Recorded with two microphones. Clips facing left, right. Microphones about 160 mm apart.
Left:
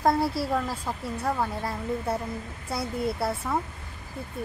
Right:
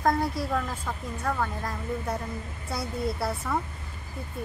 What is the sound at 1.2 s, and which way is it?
Speech, 20° left (ahead or behind).